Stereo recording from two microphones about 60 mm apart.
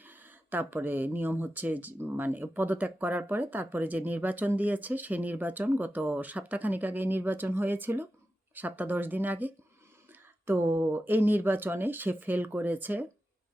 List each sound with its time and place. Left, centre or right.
0.0 s speech: right